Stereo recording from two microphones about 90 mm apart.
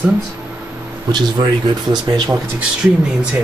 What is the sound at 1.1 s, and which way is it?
Speech, 50° right (ahead or behind).